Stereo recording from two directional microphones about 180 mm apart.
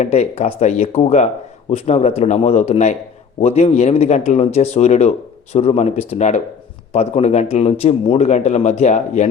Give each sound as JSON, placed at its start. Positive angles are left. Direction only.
{"t": 0.0, "sound": "a man's voice", "side_deg": 35}